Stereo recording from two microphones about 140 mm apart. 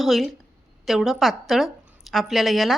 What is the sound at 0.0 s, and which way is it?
A woman's voice, centre (ahead or behind).